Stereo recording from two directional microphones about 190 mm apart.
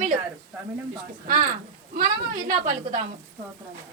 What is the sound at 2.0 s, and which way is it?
A woman's voice, 45° right (ahead or behind).